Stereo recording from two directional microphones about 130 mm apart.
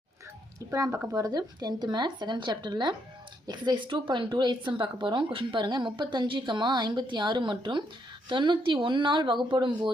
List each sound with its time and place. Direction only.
0.7 s a woman's voice: 25° right (ahead or behind)